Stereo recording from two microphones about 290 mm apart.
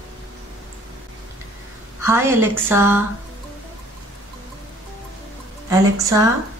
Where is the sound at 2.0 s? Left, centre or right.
Centre.